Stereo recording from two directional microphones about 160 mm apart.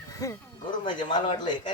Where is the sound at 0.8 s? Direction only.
30° left (ahead or behind).